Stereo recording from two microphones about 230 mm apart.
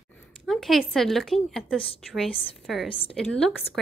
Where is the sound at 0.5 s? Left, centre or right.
Centre.